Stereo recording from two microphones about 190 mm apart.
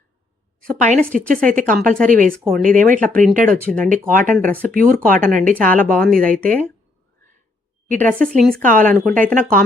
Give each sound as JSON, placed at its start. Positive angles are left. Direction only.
{"t": 0.7, "sound": "a woman's voice", "side_deg": -40}
{"t": 7.9, "sound": "a woman's voice", "side_deg": -40}